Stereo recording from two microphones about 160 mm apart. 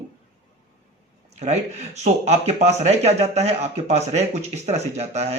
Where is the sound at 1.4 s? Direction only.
45° right (ahead or behind).